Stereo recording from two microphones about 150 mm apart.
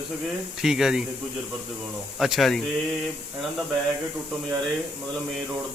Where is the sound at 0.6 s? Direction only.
5° right (ahead or behind).